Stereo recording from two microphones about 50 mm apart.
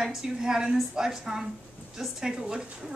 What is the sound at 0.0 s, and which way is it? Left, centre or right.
A woman's voice, centre.